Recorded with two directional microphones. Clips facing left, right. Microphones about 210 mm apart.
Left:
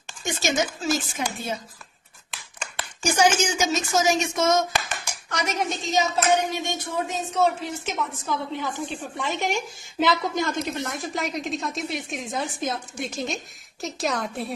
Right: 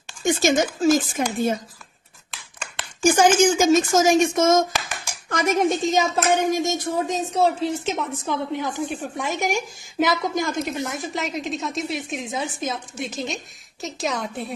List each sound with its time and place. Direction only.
0.2 s a woman's voice: 50° right (ahead or behind)
3.0 s a woman's voice: 50° right (ahead or behind); by 8.4 s 30° right (ahead or behind)
8.5 s a woman's voice: 15° right (ahead or behind); by 14.5 s centre (ahead or behind)